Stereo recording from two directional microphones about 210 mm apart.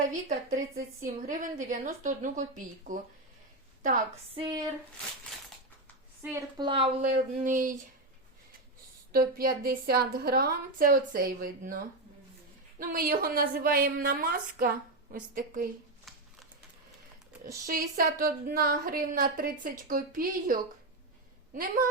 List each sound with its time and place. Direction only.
0.1 s a woman's voice: 40° right (ahead or behind)
4.4 s a sound: 20° right (ahead or behind)
6.2 s a woman's voice: 15° right (ahead or behind)
7.1 s a woman's voice: 40° right (ahead or behind)
9.1 s a woman's voice: 45° right (ahead or behind)
12.8 s a woman's voice: 45° right (ahead or behind)
16.1 s a sound: centre (ahead or behind)
17.7 s a woman's voice: 45° right (ahead or behind)